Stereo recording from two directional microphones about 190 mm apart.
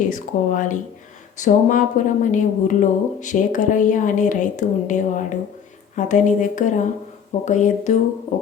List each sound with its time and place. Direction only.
0.1 s speech: 45° left (ahead or behind)
8.3 s music: 35° left (ahead or behind)